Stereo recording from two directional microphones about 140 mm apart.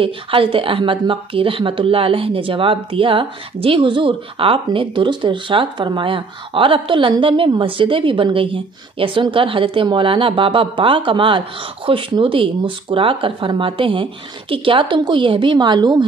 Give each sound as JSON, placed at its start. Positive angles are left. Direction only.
{"t": 0.0, "sound": "speech", "side_deg": -40}